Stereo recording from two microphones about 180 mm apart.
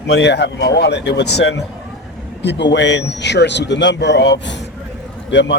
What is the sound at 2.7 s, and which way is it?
A man's voice, 90° left.